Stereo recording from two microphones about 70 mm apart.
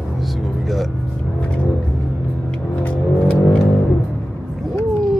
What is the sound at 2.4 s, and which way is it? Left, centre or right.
Music, centre.